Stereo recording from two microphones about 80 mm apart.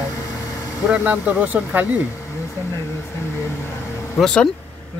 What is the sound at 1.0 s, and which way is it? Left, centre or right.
Speech, centre.